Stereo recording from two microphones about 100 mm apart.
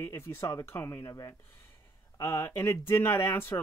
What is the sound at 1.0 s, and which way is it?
Speech, 35° left (ahead or behind).